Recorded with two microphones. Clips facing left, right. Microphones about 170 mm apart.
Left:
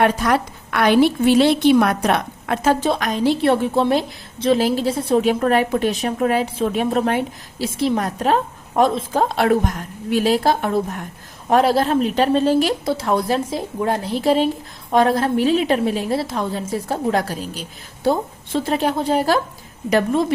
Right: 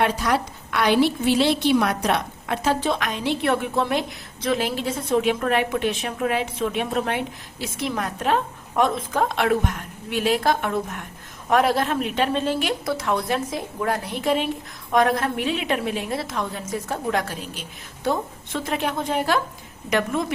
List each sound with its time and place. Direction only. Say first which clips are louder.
0.0 s a woman's voice: left 4 dB; 50° left (ahead or behind)
2.9 s a woman's voice: left 6 dB; 40° left (ahead or behind)